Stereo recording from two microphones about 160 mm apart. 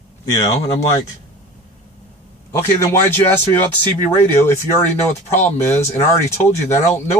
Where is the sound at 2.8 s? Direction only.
15° left (ahead or behind).